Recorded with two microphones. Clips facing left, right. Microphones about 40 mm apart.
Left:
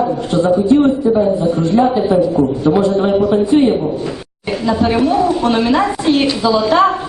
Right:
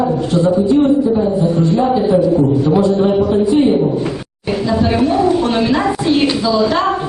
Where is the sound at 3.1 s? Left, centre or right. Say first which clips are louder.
Left 1 dB; left.